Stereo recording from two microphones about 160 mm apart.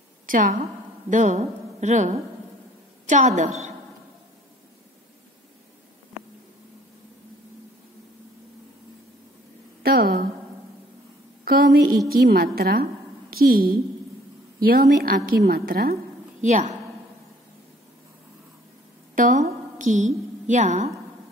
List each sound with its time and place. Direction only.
0.3 s a woman's voice: 60° right (ahead or behind)
1.1 s a woman's voice: 50° right (ahead or behind)
9.8 s a woman's voice: 70° right (ahead or behind)
11.4 s a woman's voice: 65° right (ahead or behind)
16.3 s a woman's voice: 45° right (ahead or behind)
19.1 s a sound: 55° right (ahead or behind)
20.4 s a woman's voice: 50° right (ahead or behind)